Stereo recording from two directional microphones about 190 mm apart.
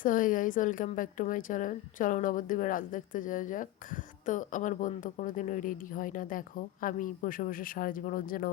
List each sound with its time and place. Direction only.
0.0 s a woman's voice: 45° left (ahead or behind)